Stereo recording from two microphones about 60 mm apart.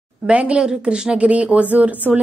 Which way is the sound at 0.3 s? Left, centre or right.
Centre.